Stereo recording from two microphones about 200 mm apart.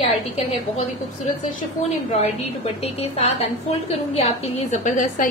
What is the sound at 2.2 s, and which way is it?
A woman's voice, 30° left (ahead or behind).